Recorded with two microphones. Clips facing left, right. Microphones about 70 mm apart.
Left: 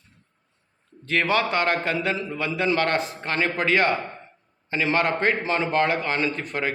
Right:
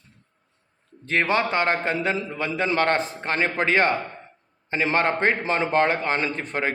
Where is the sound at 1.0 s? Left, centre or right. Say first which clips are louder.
Even; right.